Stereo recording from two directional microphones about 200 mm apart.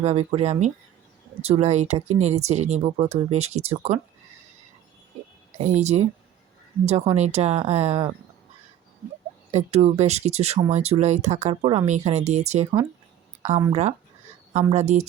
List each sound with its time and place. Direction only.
0.0 s speech: 30° right (ahead or behind)
5.5 s speech: 35° right (ahead or behind)
9.5 s speech: 35° right (ahead or behind)
14.7 s speech: 35° right (ahead or behind)